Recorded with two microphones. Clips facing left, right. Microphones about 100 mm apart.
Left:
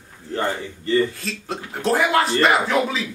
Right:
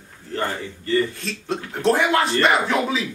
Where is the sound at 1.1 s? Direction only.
Centre (ahead or behind).